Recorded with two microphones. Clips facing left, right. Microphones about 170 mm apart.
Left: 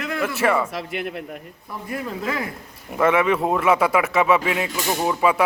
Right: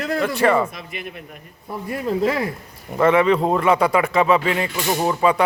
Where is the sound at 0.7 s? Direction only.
80° left.